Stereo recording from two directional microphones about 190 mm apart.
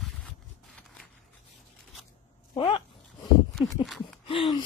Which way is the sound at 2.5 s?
30° left (ahead or behind).